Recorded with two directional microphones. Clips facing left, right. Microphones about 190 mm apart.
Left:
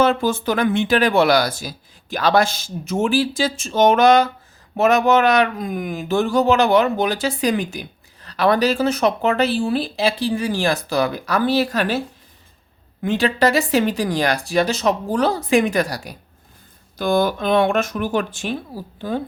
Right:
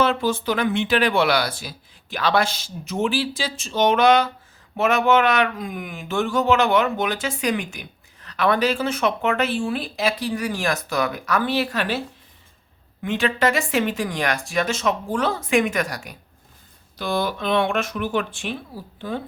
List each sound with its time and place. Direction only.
0.0 s speech: 45° left (ahead or behind)
17.0 s speech: 45° left (ahead or behind)